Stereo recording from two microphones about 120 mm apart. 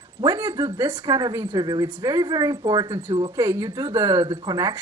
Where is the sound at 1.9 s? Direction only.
15° right (ahead or behind).